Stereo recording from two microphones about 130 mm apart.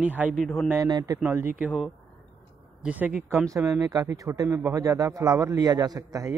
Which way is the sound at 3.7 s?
30° right (ahead or behind).